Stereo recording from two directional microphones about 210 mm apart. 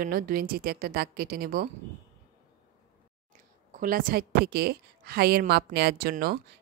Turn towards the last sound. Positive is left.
turn(degrees=-45)  # may be behind; listen again after turning